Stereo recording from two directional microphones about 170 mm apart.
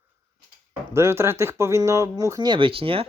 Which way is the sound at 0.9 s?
15° right (ahead or behind).